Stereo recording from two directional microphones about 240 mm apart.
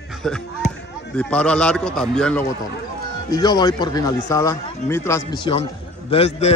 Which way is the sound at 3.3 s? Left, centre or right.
Centre.